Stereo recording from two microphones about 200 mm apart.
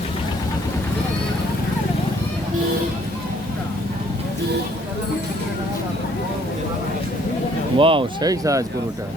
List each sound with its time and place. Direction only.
7.8 s speech: 25° right (ahead or behind)